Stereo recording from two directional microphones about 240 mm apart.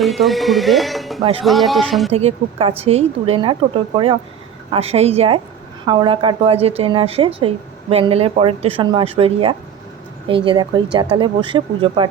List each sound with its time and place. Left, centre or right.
0.0 s speech: centre
1.2 s a woman's voice: right
1.5 s speech: centre
2.0 s a woman's voice: right